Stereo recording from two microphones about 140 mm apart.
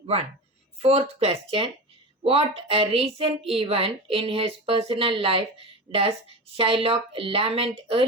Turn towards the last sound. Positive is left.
turn(degrees=-45)  # may be behind; listen again after turning